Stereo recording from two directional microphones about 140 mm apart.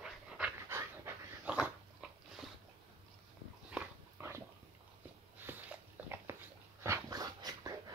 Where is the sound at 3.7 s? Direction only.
15° right (ahead or behind).